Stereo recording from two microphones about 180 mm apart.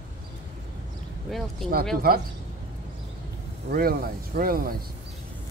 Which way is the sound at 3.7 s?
55° right (ahead or behind).